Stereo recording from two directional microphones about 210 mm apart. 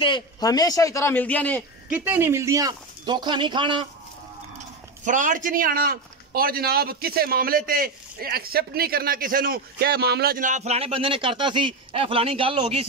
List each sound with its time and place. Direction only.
0.0 s a man's voice: 20° left (ahead or behind)
1.9 s speech: 10° right (ahead or behind)
5.0 s speech: 35° right (ahead or behind)